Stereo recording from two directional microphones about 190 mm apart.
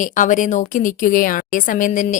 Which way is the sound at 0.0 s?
40° left (ahead or behind).